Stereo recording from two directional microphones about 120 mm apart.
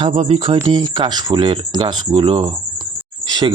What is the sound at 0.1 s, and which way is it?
Speech, 60° right (ahead or behind).